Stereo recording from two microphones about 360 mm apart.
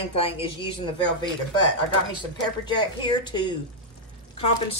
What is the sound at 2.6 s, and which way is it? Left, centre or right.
Speech, centre.